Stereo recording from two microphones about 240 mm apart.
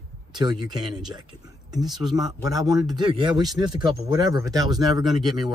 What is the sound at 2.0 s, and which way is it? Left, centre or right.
Speech, centre.